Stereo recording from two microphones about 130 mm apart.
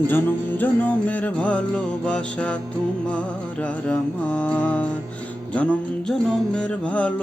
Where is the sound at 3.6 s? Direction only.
10° left (ahead or behind).